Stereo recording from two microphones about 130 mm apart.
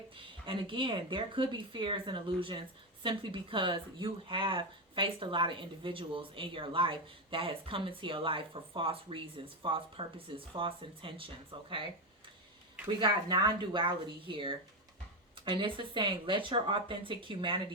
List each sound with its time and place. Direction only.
0.2 s speech: 40° right (ahead or behind)
13.0 s speech: 35° right (ahead or behind)